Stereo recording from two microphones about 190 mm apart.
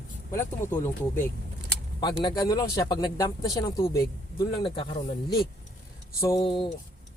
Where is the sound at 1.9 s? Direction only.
20° left (ahead or behind).